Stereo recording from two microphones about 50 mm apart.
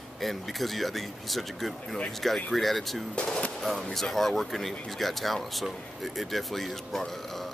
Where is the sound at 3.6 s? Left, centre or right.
Centre.